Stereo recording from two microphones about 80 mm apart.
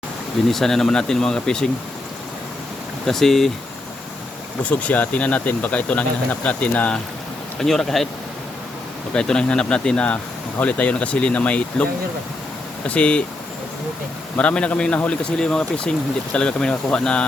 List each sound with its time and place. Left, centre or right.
0.4 s a man's voice: centre
3.1 s speech: centre
4.6 s a man's voice: centre
7.6 s speech: centre
9.1 s a man's voice: centre
14.3 s a man's voice: centre